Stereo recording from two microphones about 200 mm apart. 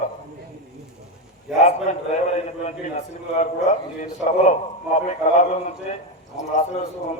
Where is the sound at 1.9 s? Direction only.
35° left (ahead or behind).